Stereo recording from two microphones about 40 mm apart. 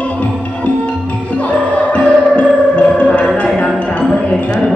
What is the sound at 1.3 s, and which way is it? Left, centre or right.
Music, left.